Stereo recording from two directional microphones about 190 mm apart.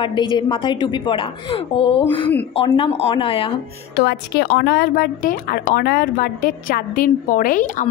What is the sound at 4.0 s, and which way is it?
A woman's voice, 60° left (ahead or behind).